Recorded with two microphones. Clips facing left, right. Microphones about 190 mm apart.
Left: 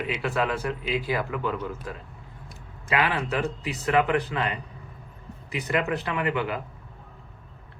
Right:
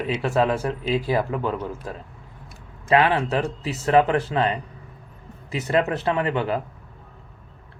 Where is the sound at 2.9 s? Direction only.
35° right (ahead or behind).